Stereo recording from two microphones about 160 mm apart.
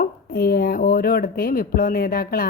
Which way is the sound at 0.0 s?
70° left (ahead or behind).